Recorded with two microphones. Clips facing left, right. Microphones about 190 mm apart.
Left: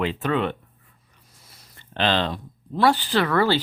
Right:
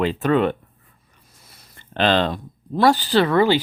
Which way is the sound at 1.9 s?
50° right (ahead or behind).